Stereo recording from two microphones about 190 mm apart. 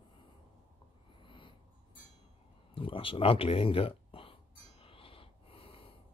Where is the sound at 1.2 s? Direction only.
25° left (ahead or behind).